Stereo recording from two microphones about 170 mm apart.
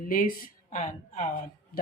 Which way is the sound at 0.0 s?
55° left (ahead or behind).